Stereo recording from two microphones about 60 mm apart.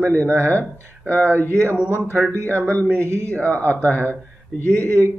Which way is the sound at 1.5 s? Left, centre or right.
Right.